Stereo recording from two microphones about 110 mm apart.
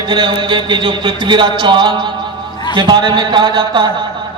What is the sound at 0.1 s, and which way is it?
A man's voice, 45° right (ahead or behind).